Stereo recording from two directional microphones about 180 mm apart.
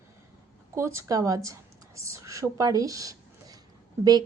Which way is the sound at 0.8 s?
15° right (ahead or behind).